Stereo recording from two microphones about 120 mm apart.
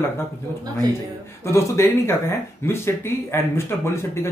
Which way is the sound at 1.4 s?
25° left (ahead or behind).